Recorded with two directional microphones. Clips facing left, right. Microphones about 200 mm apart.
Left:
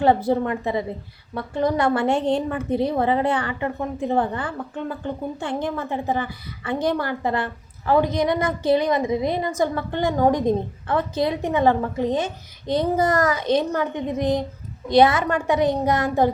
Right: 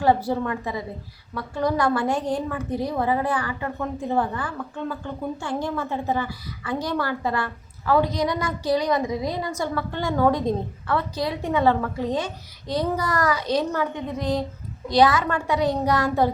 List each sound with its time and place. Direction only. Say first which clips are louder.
0.0 s a woman's voice: left 3 dB; 20° left (ahead or behind)